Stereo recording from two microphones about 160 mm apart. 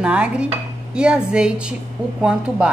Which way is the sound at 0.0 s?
5° right (ahead or behind).